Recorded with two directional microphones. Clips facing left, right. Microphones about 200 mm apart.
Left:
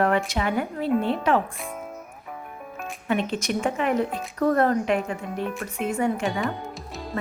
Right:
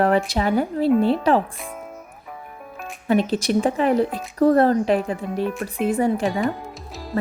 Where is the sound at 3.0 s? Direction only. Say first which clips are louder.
Right 6 dB; 35° right (ahead or behind).